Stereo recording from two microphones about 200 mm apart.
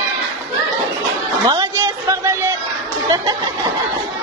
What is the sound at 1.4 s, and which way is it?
Music, 20° right (ahead or behind).